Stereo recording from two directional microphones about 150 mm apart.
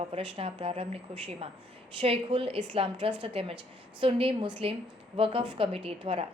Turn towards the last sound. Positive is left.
turn(degrees=-40)  # may be behind; listen again after turning